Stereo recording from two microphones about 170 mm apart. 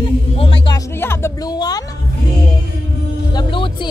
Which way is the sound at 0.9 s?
15° left (ahead or behind).